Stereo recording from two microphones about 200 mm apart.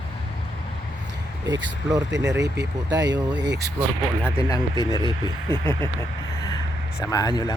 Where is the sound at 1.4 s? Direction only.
20° right (ahead or behind).